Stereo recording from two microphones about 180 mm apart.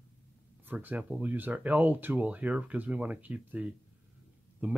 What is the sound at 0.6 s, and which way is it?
Speech, 10° right (ahead or behind).